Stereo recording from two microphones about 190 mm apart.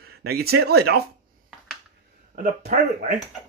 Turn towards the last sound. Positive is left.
turn(degrees=-40)  # may be behind; listen again after turning